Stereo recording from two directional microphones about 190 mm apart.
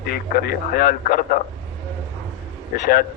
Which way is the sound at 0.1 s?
50° left (ahead or behind).